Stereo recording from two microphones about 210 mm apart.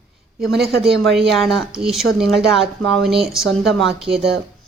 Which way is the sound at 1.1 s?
Centre (ahead or behind).